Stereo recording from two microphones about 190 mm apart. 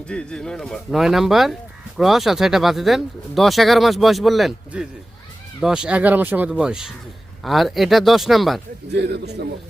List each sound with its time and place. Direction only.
0.1 s speech: 5° left (ahead or behind)
8.9 s a man's voice: 60° right (ahead or behind)